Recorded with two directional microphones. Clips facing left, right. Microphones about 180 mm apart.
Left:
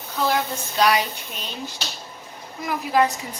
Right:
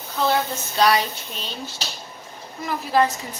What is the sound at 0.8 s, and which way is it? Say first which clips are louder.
A woman's voice: right 1 dB; 10° left (ahead or behind).